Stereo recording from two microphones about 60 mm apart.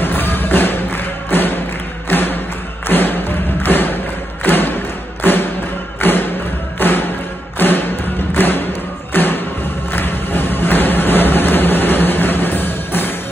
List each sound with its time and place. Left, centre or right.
0.0 s music: left
2.0 s thump: left
5.2 s music: left
9.9 s a sound: left